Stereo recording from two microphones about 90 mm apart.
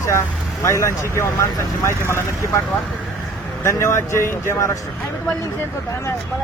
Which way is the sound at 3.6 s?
35° left (ahead or behind).